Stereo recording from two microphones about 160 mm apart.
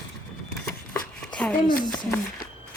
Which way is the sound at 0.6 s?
5° left (ahead or behind).